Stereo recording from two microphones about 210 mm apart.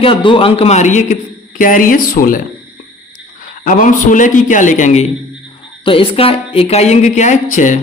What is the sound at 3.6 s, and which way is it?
Speech, 35° left (ahead or behind).